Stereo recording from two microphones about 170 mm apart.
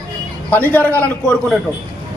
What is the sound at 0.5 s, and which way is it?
Speech, 10° left (ahead or behind).